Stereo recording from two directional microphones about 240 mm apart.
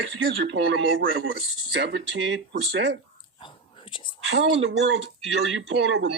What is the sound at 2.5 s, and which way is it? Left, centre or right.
Speech, right.